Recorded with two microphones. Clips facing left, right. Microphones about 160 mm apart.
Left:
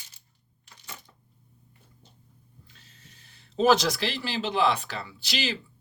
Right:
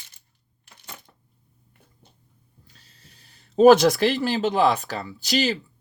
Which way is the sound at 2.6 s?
35° right (ahead or behind).